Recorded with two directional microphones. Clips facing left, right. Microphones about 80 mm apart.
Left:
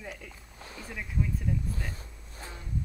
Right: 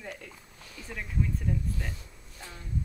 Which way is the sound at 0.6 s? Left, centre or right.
Left.